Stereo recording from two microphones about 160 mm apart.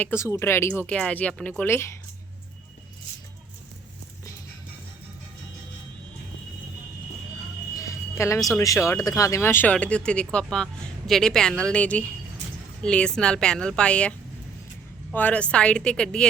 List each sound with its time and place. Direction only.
0.0 s speech: 15° left (ahead or behind)
7.8 s music: 20° left (ahead or behind)
8.5 s speech: 20° left (ahead or behind)
15.1 s speech: 10° left (ahead or behind)